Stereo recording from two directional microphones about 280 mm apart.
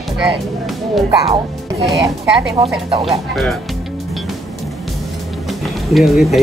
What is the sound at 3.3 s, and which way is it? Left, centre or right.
Speech, centre.